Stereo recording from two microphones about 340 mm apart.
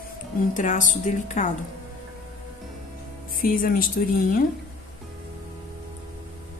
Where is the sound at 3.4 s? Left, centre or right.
Left.